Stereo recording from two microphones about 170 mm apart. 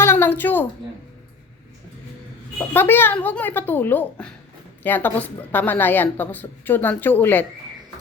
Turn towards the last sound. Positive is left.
turn(degrees=10)  # may be behind; listen again after turning